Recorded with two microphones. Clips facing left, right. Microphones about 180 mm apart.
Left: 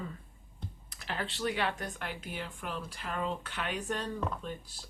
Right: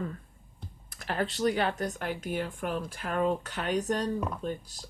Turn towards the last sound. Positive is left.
turn(degrees=-40)  # may be behind; listen again after turning